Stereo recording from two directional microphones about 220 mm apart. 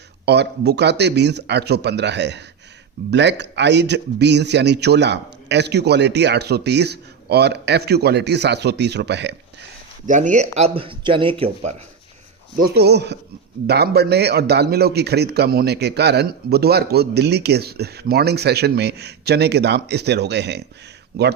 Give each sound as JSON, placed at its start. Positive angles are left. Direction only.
{"t": 0.3, "sound": "a man's voice", "side_deg": -50}
{"t": 10.1, "sound": "speech", "side_deg": -35}
{"t": 12.7, "sound": "a man's voice", "side_deg": -50}